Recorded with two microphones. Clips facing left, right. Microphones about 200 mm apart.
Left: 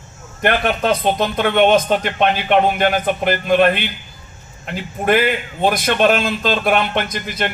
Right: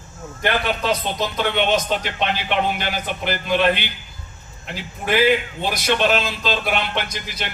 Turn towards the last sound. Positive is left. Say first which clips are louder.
# left 6 dB
turn(degrees=55)  # may be behind; listen again after turning